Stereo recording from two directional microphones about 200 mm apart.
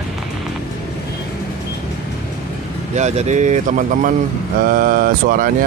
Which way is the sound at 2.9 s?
35° right (ahead or behind).